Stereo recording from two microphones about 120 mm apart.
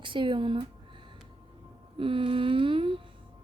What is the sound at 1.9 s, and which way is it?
A woman's voice, 45° right (ahead or behind).